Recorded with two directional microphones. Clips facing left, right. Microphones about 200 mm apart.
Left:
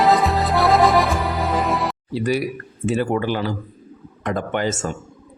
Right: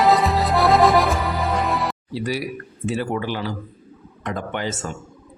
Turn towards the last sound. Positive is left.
turn(degrees=50)  # may be behind; listen again after turning